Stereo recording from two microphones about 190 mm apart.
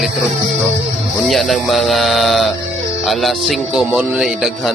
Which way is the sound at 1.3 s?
Centre (ahead or behind).